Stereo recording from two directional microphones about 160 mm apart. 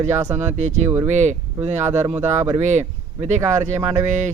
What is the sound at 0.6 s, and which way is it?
Speech, 45° right (ahead or behind).